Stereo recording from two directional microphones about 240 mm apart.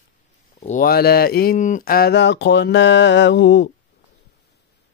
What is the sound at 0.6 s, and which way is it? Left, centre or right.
Speech, left.